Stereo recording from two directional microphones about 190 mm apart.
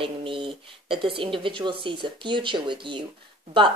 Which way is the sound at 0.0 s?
25° right (ahead or behind).